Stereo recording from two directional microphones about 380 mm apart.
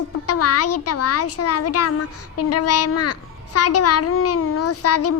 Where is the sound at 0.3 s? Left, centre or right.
Left.